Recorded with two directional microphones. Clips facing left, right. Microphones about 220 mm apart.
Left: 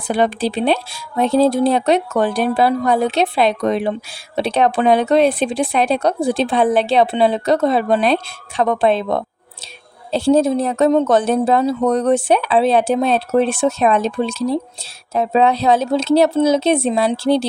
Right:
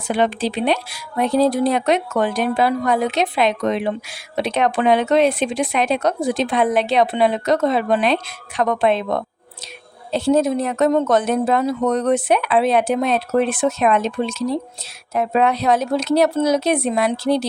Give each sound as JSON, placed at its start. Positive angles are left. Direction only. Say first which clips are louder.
{"t": 0.1, "sound": "a woman's voice", "louder": "left 2 dB", "side_deg": 35}